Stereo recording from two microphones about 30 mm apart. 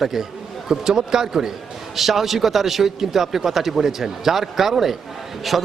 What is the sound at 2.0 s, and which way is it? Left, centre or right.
A man's voice, centre.